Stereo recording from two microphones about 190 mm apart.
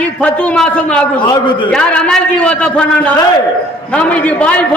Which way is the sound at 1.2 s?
25° left (ahead or behind).